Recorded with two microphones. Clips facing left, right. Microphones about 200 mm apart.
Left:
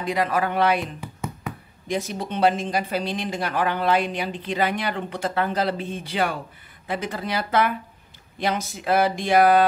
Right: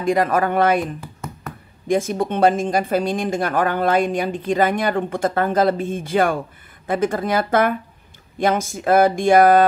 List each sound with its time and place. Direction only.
0.0 s speech: 45° right (ahead or behind)
1.9 s speech: 50° right (ahead or behind)